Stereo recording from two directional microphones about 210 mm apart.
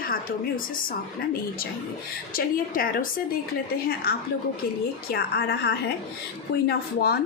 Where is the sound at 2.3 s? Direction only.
45° left (ahead or behind).